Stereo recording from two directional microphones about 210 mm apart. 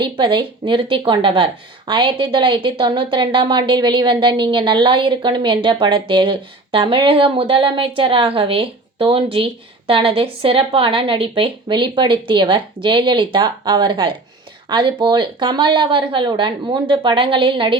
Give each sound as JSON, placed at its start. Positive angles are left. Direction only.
{"t": 0.0, "sound": "a woman's voice", "side_deg": -20}